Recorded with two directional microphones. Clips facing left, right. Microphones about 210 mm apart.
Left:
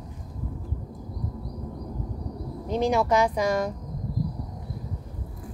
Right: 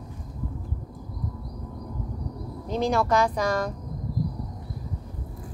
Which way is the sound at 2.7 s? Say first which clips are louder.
Left 1 dB; 15° left (ahead or behind).